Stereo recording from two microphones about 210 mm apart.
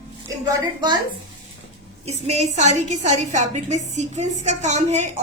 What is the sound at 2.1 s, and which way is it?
A woman's voice, 30° right (ahead or behind).